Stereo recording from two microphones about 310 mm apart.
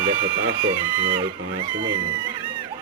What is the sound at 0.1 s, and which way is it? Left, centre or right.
Speech, right.